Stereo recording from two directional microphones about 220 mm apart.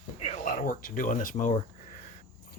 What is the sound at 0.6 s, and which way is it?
Speech, 40° left (ahead or behind).